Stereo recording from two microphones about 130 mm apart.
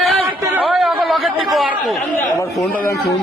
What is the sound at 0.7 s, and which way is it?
Speech, centre (ahead or behind).